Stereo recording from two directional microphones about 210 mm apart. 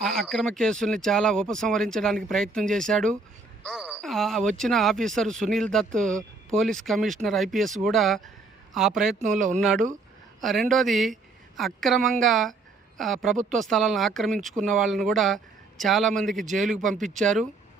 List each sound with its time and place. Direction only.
0.2 s speech: 5° left (ahead or behind)
9.1 s speech: 35° right (ahead or behind)
9.6 s speech: centre (ahead or behind)